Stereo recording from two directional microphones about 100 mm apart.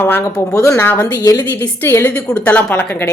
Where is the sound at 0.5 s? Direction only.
30° left (ahead or behind).